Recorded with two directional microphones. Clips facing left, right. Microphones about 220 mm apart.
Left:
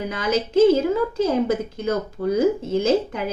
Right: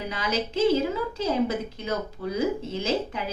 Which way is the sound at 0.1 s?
50° left (ahead or behind).